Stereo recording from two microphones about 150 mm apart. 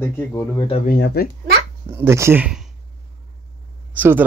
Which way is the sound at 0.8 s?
90° left.